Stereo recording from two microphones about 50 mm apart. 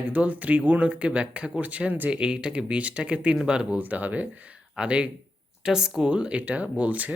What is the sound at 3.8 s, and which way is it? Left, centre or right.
Speech, right.